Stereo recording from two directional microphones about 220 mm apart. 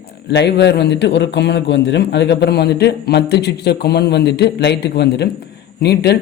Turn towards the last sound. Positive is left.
turn(degrees=45)  # may be behind; listen again after turning